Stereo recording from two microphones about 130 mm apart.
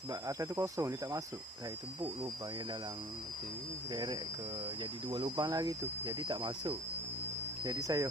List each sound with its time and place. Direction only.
0.1 s speech: 25° right (ahead or behind)
3.9 s speech: 35° right (ahead or behind)